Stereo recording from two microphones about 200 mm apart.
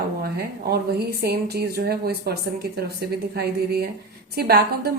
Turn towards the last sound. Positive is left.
turn(degrees=-50)  # may be behind; listen again after turning